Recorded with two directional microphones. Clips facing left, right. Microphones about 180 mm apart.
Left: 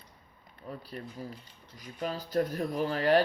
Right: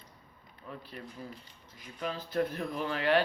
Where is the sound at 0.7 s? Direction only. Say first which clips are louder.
Left 3 dB; 40° left (ahead or behind).